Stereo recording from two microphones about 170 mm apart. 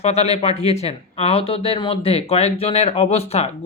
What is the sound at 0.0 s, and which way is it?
Speech, 40° left (ahead or behind).